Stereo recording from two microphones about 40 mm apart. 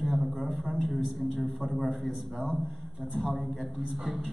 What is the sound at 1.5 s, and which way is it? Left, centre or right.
Speech, centre.